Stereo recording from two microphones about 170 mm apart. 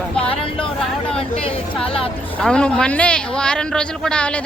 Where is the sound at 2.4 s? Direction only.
5° left (ahead or behind).